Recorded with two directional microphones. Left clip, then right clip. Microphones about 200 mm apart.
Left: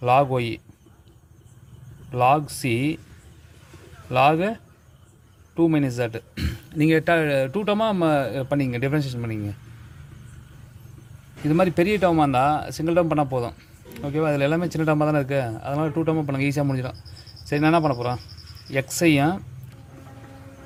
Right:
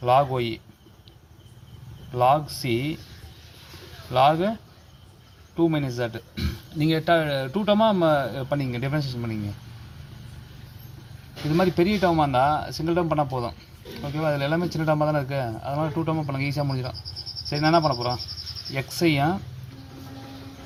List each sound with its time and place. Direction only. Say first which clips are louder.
0.0 s a man's voice: left 1 dB; 55° left (ahead or behind)
2.1 s a man's voice: left 1 dB; 55° left (ahead or behind)
4.1 s a man's voice: left 1 dB; 55° left (ahead or behind)
5.5 s a man's voice: left 3 dB; 55° left (ahead or behind)
11.5 s a man's voice: left 2 dB; 55° left (ahead or behind)